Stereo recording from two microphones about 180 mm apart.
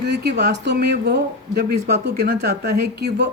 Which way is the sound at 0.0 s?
65° right (ahead or behind).